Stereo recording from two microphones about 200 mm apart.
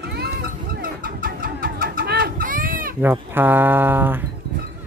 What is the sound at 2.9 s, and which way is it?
Speech, 10° right (ahead or behind).